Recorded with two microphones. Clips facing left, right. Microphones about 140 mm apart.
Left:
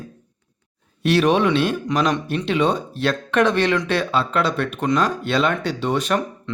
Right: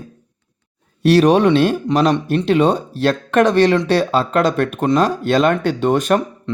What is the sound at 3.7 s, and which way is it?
Speech, 25° right (ahead or behind).